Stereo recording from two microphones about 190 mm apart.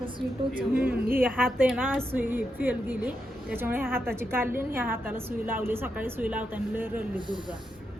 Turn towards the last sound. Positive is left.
turn(degrees=-25)  # may be behind; listen again after turning